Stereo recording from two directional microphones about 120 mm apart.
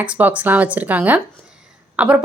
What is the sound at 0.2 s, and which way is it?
A woman's voice, 15° right (ahead or behind).